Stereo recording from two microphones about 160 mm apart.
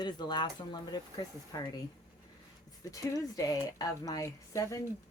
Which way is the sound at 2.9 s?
20° left (ahead or behind).